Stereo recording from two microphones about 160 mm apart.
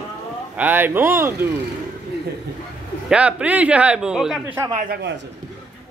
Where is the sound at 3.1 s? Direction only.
10° right (ahead or behind).